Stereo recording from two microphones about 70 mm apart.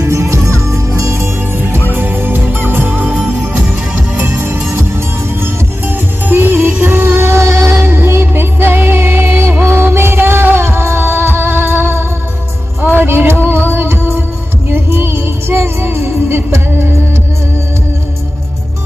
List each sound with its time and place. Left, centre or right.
0.0 s music: right
7.8 s music: right